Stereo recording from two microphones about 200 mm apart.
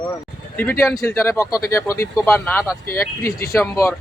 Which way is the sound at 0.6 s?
10° left (ahead or behind).